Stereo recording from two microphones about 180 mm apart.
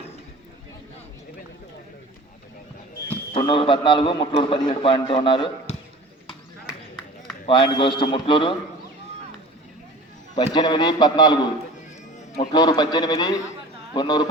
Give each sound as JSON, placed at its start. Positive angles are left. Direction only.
{"t": 3.3, "sound": "a man's voice", "side_deg": 30}
{"t": 7.4, "sound": "a man's voice", "side_deg": 25}
{"t": 10.3, "sound": "a man's voice", "side_deg": 25}